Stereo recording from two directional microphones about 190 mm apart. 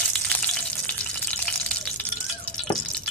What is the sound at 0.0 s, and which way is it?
Frying, 5° left (ahead or behind).